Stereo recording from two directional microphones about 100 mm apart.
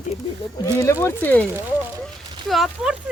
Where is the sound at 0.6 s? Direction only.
30° left (ahead or behind).